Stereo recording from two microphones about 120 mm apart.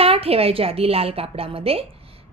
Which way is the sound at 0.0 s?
55° right (ahead or behind).